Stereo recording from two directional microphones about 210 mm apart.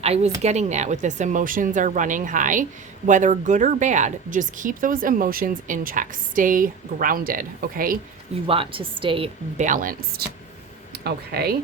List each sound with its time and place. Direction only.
0.0 s speech: 30° right (ahead or behind)
8.4 s a woman's voice: 25° right (ahead or behind); by 11.5 s 50° right (ahead or behind)